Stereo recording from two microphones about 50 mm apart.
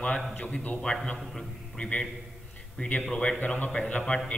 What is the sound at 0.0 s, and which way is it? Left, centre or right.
Speech, left.